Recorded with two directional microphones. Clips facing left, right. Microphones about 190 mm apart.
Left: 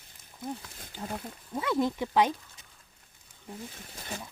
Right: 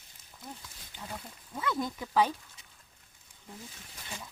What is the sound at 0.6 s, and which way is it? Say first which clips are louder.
Speech: left 5 dB; 60° left (ahead or behind).